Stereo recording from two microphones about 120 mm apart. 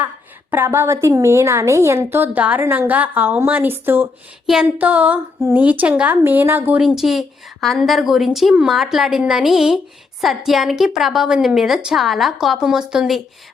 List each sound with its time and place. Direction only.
0.5 s a woman's voice: 20° right (ahead or behind)
4.4 s a woman's voice: 5° right (ahead or behind)
6.7 s a woman's voice: centre (ahead or behind)